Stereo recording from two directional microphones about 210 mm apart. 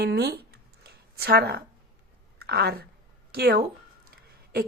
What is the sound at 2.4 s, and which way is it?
Speech, 50° right (ahead or behind).